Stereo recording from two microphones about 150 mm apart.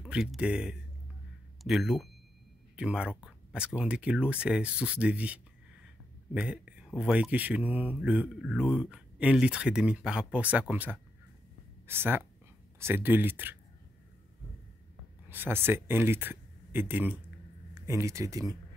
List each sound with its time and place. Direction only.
0.0 s speech: centre (ahead or behind)
15.2 s speech: 15° right (ahead or behind)